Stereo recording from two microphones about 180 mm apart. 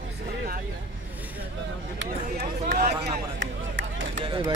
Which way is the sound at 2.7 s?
55° right (ahead or behind).